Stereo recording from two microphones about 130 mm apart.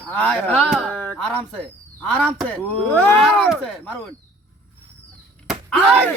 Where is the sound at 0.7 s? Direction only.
5° left (ahead or behind).